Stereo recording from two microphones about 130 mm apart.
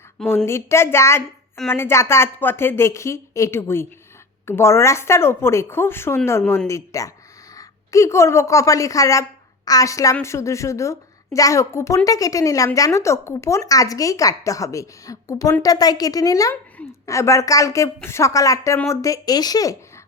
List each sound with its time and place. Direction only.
0.4 s a woman's voice: 20° left (ahead or behind)